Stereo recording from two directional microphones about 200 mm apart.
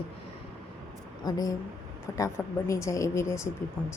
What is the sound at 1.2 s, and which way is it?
A woman's voice, 20° left (ahead or behind).